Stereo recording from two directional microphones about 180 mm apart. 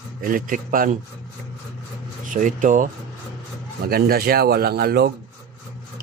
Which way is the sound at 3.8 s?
60° right (ahead or behind).